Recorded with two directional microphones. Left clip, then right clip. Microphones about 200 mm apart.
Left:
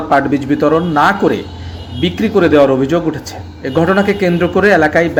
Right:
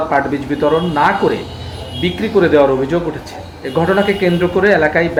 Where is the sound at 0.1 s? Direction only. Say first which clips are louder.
Left 3 dB; 40° left (ahead or behind).